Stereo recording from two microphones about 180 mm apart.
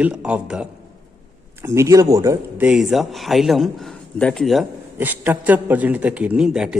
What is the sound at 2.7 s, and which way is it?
A man's voice, centre (ahead or behind).